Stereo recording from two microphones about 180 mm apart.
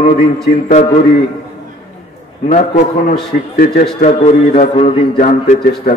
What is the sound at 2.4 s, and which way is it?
Speech, 40° left (ahead or behind).